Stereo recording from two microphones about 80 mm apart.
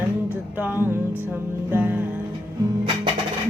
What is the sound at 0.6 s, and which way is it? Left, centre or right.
Music, right.